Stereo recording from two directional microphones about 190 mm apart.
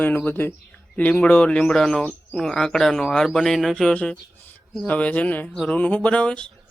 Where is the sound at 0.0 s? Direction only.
10° left (ahead or behind).